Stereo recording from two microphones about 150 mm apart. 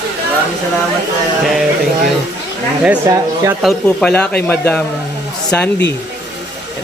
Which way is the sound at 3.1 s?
20° right (ahead or behind).